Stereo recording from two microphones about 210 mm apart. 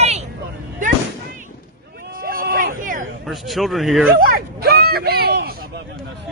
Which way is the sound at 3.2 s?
Centre (ahead or behind).